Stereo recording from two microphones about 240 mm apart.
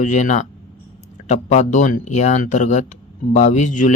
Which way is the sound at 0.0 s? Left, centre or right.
Left.